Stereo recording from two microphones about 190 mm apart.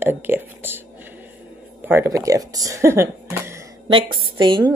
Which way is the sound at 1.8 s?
10° right (ahead or behind).